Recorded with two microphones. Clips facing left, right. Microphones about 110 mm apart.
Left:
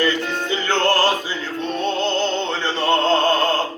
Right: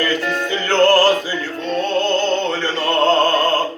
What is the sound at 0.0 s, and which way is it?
Music, 20° left (ahead or behind).